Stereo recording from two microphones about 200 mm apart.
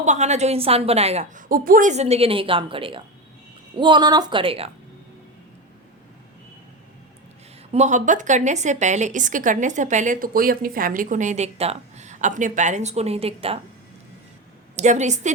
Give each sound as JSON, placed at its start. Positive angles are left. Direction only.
{"t": 0.0, "sound": "speech", "side_deg": -35}
{"t": 7.7, "sound": "speech", "side_deg": -35}
{"t": 14.8, "sound": "speech", "side_deg": -35}